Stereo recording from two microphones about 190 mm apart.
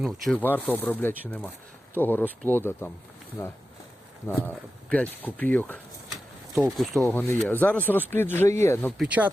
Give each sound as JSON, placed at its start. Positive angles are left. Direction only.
{"t": 0.0, "sound": "speech", "side_deg": 5}
{"t": 9.0, "sound": "speech", "side_deg": -5}